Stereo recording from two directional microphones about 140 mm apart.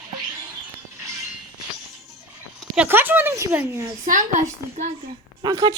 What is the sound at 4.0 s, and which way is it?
Speech, 60° right (ahead or behind).